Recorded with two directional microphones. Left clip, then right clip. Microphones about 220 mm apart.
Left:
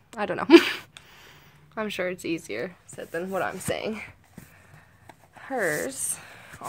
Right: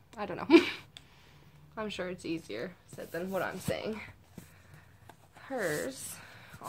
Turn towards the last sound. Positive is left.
turn(degrees=45)  # may be behind; listen again after turning